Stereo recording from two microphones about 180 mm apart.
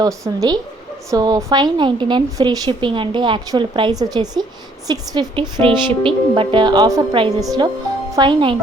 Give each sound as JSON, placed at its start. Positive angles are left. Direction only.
{"t": 0.0, "sound": "a woman's voice", "side_deg": -20}